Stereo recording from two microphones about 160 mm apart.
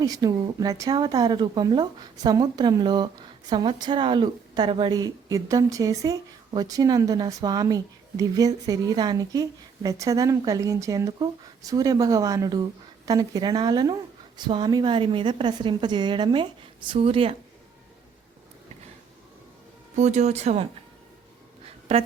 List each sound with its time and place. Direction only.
0.0 s a woman's voice: 20° right (ahead or behind)
20.0 s speech: 45° right (ahead or behind)